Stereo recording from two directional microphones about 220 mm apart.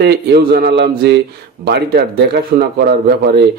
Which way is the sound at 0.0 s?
45° right (ahead or behind).